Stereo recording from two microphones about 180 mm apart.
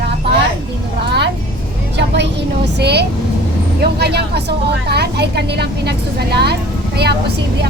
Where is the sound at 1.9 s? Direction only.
70° right (ahead or behind).